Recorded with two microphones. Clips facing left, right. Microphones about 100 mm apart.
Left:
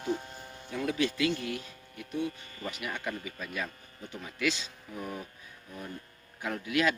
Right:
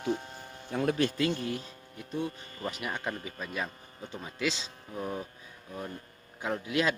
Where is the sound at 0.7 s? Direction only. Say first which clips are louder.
Right 2 dB; 45° right (ahead or behind); by 5.2 s 25° right (ahead or behind).